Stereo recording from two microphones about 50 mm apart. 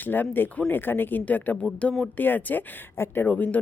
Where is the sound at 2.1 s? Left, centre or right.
Left.